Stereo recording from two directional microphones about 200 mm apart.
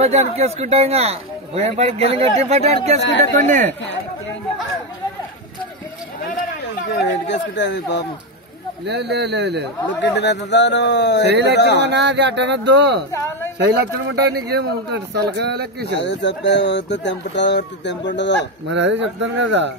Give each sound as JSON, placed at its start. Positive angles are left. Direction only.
{"t": 0.0, "sound": "a man's voice", "side_deg": -35}
{"t": 6.9, "sound": "speech", "side_deg": 60}
{"t": 8.8, "sound": "a man's voice", "side_deg": -60}
{"t": 9.9, "sound": "speech", "side_deg": 60}
{"t": 11.2, "sound": "a man's voice", "side_deg": -60}
{"t": 11.5, "sound": "speech", "side_deg": 60}
{"t": 11.9, "sound": "a man's voice", "side_deg": -60}
{"t": 13.1, "sound": "a sound", "side_deg": 15}
{"t": 13.6, "sound": "a man's voice", "side_deg": -60}
{"t": 16.0, "sound": "speech", "side_deg": 60}
{"t": 18.7, "sound": "a man's voice", "side_deg": -60}